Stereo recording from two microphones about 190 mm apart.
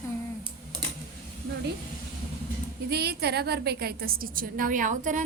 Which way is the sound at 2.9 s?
60° right (ahead or behind).